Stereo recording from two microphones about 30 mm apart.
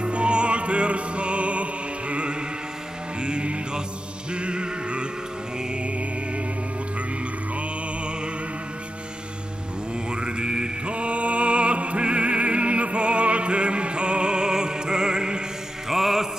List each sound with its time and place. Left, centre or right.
0.0 s music: right
10.1 s mantra: right
10.9 s music: right
15.9 s music: centre